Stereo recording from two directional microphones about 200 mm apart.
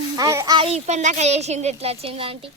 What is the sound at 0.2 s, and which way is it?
Speech, 15° right (ahead or behind).